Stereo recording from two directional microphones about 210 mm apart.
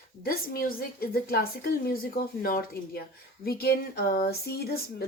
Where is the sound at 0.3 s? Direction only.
45° left (ahead or behind).